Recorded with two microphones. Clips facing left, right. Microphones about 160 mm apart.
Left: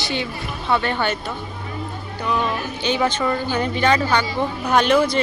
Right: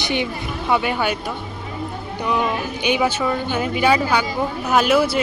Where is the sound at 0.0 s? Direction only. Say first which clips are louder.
Right 3 dB; 15° right (ahead or behind).